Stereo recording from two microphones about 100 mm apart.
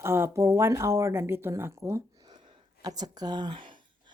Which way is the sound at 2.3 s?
45° right (ahead or behind).